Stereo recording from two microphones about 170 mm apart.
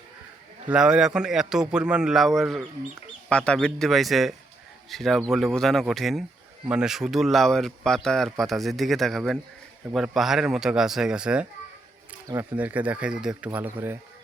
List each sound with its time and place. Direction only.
0.7 s speech: 5° right (ahead or behind)
12.3 s speech: 20° right (ahead or behind)
12.5 s speech: 10° right (ahead or behind)